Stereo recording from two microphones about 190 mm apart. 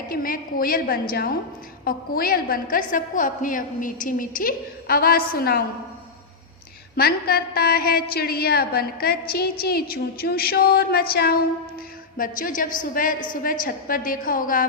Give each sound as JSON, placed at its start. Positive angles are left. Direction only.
{"t": 0.1, "sound": "a woman's voice", "side_deg": 50}
{"t": 6.9, "sound": "a woman's voice", "side_deg": 55}